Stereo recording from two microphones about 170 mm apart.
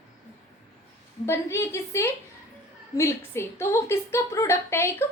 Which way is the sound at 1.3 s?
15° left (ahead or behind).